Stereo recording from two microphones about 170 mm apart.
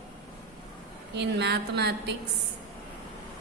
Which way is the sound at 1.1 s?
80° right.